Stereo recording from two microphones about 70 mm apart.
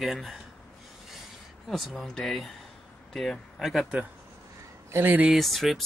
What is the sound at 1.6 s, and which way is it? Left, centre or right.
Speech, centre.